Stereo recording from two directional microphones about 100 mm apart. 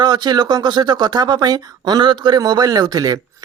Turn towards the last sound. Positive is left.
turn(degrees=-40)  # may be behind; listen again after turning